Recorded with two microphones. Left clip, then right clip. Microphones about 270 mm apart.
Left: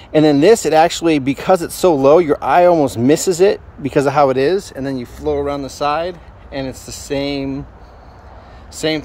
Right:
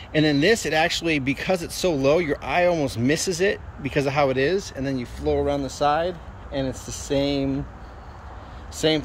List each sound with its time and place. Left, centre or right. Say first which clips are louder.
0.1 s speech: left 9 dB; centre
8.8 s speech: left 3 dB; centre